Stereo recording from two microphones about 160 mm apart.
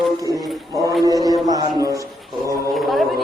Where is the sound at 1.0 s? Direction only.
20° right (ahead or behind).